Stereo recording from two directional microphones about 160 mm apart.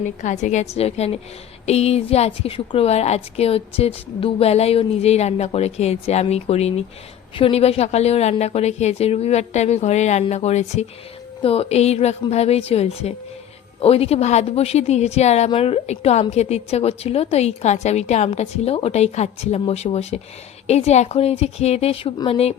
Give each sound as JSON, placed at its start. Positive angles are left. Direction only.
{"t": 0.2, "sound": "a woman's voice", "side_deg": 50}